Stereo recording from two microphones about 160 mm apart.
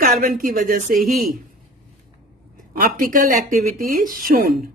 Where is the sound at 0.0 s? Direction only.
60° right (ahead or behind).